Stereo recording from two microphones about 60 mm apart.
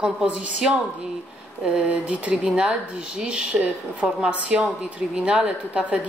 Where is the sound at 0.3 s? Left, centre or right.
Right.